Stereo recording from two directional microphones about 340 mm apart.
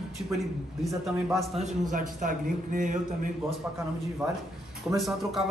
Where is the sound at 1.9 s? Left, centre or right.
Right.